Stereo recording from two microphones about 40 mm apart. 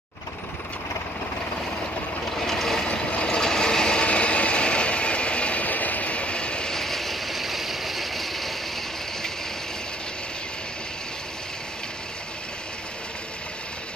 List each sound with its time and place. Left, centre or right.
2.3 s vehicle: centre
2.9 s a sound: left
6.7 s vehicle: centre